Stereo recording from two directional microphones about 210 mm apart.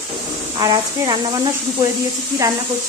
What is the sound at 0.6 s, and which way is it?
Speech, 20° right (ahead or behind).